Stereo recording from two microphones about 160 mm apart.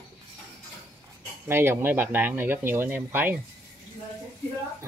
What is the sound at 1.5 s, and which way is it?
Speech, 15° right (ahead or behind).